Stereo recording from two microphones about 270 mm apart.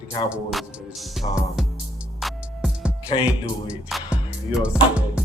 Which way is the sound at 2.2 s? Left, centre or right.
Centre.